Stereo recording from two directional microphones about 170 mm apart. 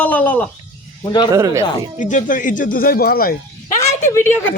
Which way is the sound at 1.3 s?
20° right (ahead or behind).